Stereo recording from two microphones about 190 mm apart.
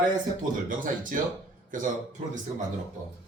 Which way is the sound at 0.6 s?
45° right (ahead or behind).